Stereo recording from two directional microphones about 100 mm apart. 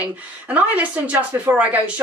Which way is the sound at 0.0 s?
15° right (ahead or behind).